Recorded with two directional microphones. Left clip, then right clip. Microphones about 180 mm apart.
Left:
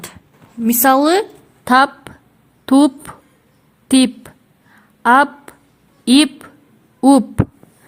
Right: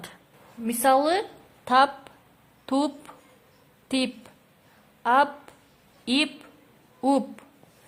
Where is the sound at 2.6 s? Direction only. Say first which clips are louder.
Left 13 dB; 45° left (ahead or behind).